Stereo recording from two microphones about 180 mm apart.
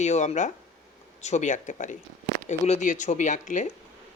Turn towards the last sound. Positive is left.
turn(degrees=45)  # may be behind; listen again after turning